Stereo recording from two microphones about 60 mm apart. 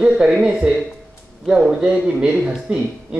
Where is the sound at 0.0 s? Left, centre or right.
Centre.